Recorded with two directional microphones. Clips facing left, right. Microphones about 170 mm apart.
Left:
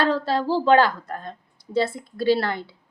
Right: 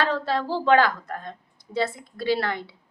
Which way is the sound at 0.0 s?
35° left (ahead or behind).